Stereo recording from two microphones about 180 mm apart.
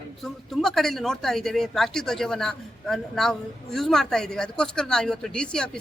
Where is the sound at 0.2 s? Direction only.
Centre (ahead or behind).